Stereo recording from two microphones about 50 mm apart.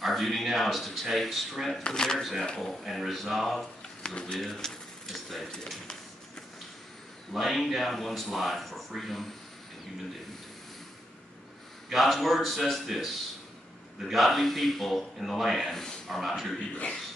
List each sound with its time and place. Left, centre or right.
0.0 s speech: centre
1.8 s speech: centre
2.8 s speech: centre
4.0 s speech: centre
7.3 s speech: centre
11.9 s speech: centre
16.5 s a man's voice: left